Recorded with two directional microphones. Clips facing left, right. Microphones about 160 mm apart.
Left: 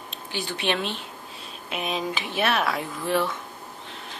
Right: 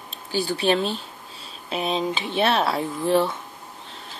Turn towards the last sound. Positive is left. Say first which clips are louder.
# right 5 dB
turn(degrees=-30)  # may be behind; listen again after turning